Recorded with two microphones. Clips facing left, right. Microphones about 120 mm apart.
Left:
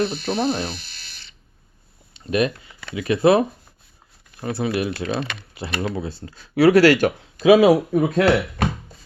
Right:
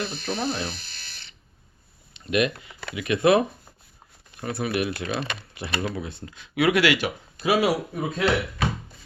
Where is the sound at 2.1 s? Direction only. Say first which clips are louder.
Left 3 dB; 35° left (ahead or behind).